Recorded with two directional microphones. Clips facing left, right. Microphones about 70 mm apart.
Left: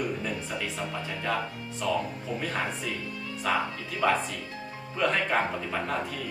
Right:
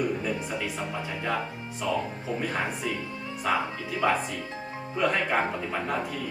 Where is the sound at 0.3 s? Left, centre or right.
Right.